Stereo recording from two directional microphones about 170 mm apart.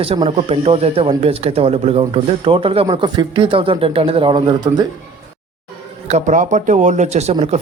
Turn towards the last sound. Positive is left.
turn(degrees=-40)  # may be behind; listen again after turning